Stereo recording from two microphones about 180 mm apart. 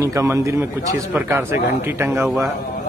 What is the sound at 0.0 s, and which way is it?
Speech, 15° right (ahead or behind).